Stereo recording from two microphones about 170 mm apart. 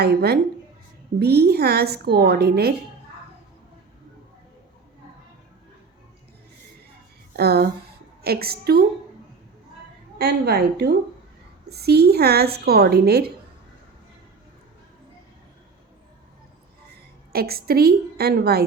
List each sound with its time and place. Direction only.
0.0 s a woman's voice: 70° right (ahead or behind)
7.3 s a woman's voice: 65° right (ahead or behind)
10.2 s a woman's voice: 70° right (ahead or behind)
17.3 s a woman's voice: 65° right (ahead or behind)